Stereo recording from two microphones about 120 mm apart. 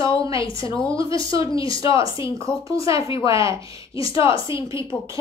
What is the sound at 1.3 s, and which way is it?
Speech, 45° left (ahead or behind).